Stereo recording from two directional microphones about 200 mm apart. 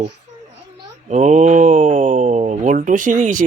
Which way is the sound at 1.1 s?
35° right (ahead or behind).